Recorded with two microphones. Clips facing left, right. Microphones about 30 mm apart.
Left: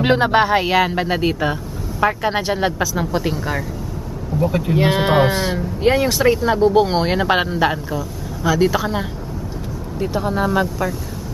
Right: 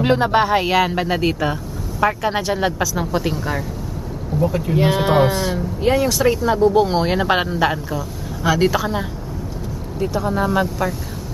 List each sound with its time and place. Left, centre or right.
0.0 s speech: centre
4.7 s speech: left; by 8.8 s centre
8.8 s speech: centre
10.1 s speech: centre
10.5 s speech: centre